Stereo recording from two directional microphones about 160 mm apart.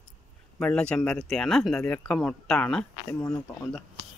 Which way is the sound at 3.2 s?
20° left (ahead or behind).